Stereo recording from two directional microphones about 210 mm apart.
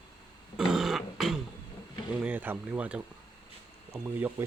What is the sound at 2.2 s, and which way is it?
Speech, 5° right (ahead or behind).